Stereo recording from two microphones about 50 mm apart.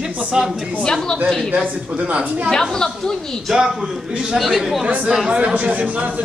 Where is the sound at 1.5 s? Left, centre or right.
Right.